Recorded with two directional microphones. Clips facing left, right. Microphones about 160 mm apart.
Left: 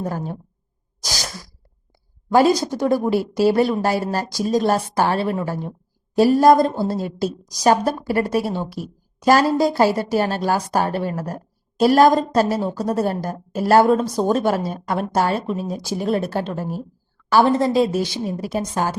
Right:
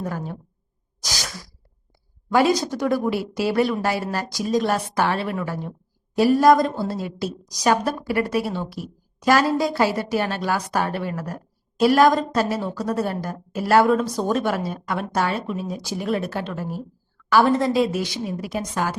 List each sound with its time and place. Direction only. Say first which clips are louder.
0.0 s a woman's voice: left 3 dB; 35° left (ahead or behind)
1.0 s sneeze: left 2 dB; 35° left (ahead or behind)
2.3 s a woman's voice: left 3 dB; 35° left (ahead or behind)